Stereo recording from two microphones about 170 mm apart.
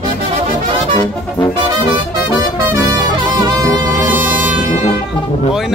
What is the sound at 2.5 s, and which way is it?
Music, 20° right (ahead or behind).